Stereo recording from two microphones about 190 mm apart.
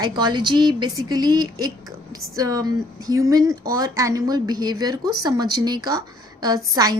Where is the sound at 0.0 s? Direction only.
20° right (ahead or behind).